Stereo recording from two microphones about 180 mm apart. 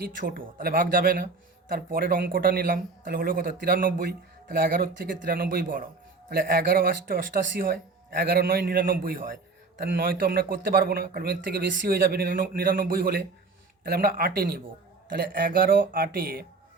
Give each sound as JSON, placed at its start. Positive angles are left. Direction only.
{"t": 0.0, "sound": "speech", "side_deg": -50}